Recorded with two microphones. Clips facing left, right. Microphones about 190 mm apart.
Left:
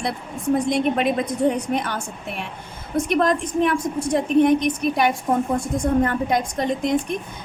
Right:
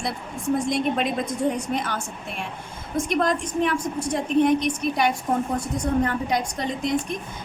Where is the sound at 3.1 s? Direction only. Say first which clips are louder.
Left 3 dB; 55° left (ahead or behind).